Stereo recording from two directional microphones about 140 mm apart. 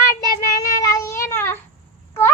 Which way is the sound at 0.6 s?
25° left (ahead or behind).